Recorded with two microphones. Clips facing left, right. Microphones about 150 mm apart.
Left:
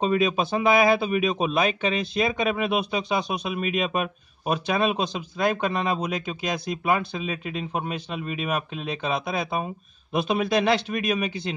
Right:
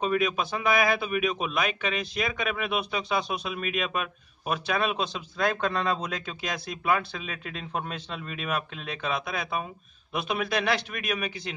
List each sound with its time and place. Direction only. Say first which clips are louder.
0.0 s speech: left 4 dB; 25° left (ahead or behind)